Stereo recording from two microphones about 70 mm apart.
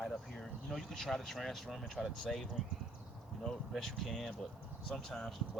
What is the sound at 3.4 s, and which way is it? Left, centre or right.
Speech, centre.